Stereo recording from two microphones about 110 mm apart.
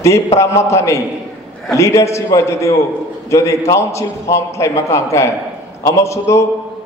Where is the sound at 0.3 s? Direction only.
25° left (ahead or behind).